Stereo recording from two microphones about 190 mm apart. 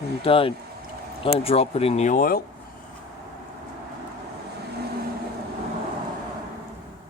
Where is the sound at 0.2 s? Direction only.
30° left (ahead or behind); by 2.4 s 45° left (ahead or behind).